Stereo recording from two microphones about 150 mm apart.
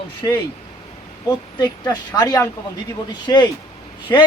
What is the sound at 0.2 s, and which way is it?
Speech, 25° left (ahead or behind).